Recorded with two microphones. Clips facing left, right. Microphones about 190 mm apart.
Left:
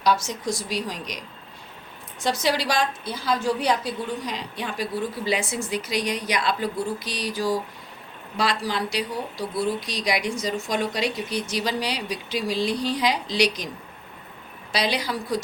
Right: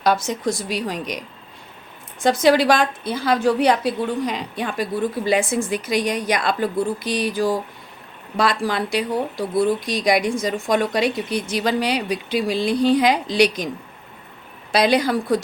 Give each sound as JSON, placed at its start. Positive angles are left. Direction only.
{"t": 0.0, "sound": "a woman's voice", "side_deg": -55}
{"t": 2.2, "sound": "a woman's voice", "side_deg": -55}
{"t": 14.7, "sound": "a woman's voice", "side_deg": -50}